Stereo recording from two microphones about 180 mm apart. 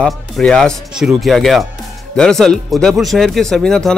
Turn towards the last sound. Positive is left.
turn(degrees=0)  # may be behind; listen again after turning